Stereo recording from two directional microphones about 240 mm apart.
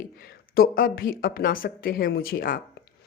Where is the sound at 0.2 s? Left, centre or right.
Left.